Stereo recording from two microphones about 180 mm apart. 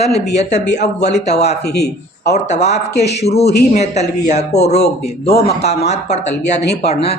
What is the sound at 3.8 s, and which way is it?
Speech, 40° left (ahead or behind).